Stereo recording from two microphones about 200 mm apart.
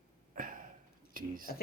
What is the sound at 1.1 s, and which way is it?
Speech, 45° right (ahead or behind).